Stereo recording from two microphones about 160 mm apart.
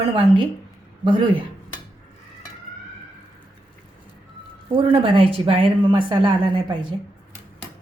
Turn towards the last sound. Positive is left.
turn(degrees=-30)  # may be behind; listen again after turning